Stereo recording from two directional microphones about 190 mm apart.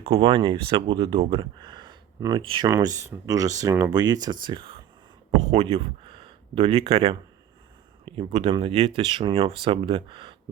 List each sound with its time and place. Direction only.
0.0 s speech: 30° right (ahead or behind)